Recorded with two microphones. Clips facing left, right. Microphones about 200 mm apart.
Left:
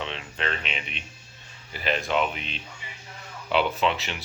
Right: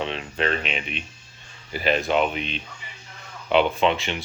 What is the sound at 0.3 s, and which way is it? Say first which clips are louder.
Speech: right 6 dB; 40° right (ahead or behind).